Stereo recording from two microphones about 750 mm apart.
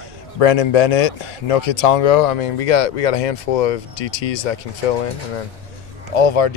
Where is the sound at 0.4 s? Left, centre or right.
Left.